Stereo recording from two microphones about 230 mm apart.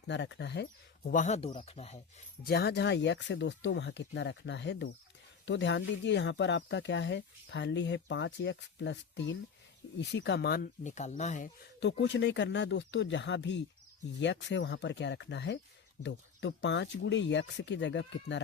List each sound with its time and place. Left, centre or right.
0.1 s speech: left
1.1 s speech: left
2.4 s speech: left
11.8 s speech: left